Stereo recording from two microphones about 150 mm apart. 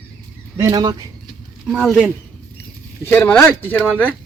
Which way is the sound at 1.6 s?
10° right (ahead or behind).